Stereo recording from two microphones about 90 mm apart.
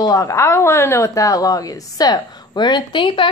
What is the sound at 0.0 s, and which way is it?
A woman's voice, 40° left (ahead or behind).